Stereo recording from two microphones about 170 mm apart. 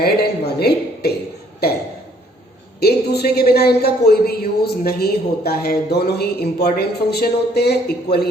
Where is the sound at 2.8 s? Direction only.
70° left (ahead or behind).